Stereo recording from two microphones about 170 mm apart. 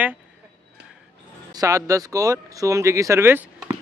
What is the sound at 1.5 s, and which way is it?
Speech, 20° right (ahead or behind).